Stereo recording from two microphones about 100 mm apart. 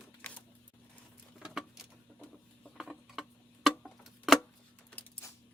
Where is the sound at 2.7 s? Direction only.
5° right (ahead or behind).